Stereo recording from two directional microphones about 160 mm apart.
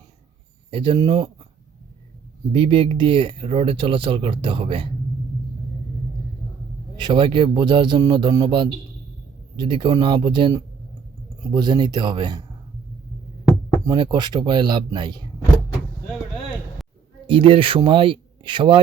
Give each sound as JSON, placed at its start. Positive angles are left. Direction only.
{"t": 0.7, "sound": "speech", "side_deg": -30}
{"t": 2.5, "sound": "speech", "side_deg": -35}
{"t": 6.9, "sound": "speech", "side_deg": -30}
{"t": 13.8, "sound": "speech", "side_deg": -25}
{"t": 17.2, "sound": "speech", "side_deg": -35}